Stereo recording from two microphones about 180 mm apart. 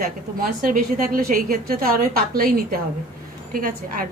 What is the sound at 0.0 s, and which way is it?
A woman's voice, 50° right (ahead or behind).